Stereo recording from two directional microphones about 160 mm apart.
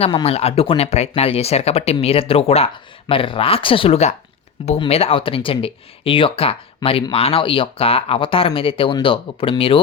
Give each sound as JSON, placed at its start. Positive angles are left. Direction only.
{"t": 0.0, "sound": "speech", "side_deg": 35}